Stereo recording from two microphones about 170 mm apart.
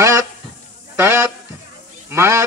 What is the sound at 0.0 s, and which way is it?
Goose, 20° right (ahead or behind).